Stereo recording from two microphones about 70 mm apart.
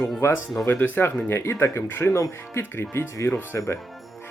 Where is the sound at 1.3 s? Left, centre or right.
Left.